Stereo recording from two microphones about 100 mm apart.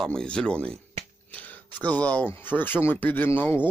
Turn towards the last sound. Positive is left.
turn(degrees=20)  # may be behind; listen again after turning